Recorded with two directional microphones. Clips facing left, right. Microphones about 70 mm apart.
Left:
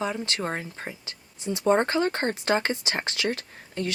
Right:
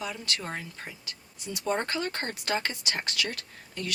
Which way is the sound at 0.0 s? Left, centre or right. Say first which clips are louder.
Left 6 dB; left.